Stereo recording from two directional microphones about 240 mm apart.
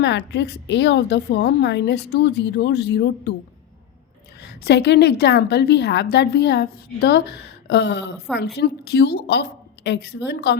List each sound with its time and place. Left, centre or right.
0.0 s a woman's voice: left
4.4 s a woman's voice: left